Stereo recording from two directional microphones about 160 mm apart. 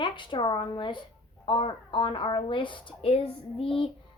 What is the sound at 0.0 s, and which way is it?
A child's voice, 30° left (ahead or behind).